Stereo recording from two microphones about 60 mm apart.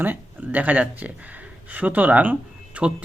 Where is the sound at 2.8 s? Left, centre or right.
Centre.